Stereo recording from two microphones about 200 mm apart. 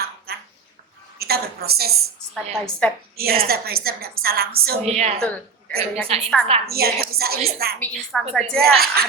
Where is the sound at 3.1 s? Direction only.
50° right (ahead or behind).